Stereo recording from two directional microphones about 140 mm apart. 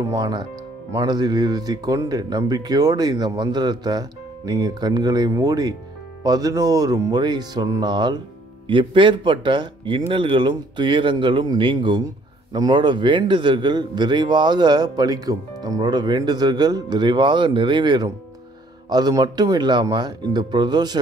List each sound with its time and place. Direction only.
0.0 s a man's voice: 25° right (ahead or behind)